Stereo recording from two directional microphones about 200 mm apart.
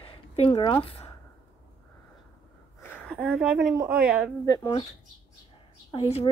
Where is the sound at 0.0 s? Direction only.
25° left (ahead or behind).